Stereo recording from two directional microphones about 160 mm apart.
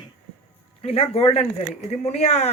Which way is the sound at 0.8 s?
40° left (ahead or behind).